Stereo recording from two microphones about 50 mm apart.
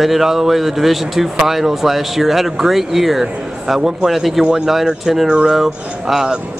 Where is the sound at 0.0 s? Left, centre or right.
Centre.